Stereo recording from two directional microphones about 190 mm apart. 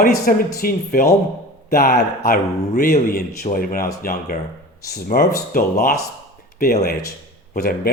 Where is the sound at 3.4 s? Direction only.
50° left (ahead or behind).